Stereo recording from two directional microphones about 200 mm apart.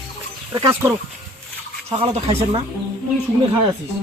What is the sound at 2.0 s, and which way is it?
Speech, 30° right (ahead or behind).